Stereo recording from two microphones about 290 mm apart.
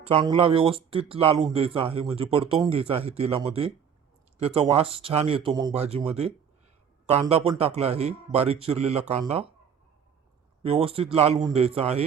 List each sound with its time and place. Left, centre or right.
0.0 s speech: centre
7.1 s speech: right
10.6 s speech: centre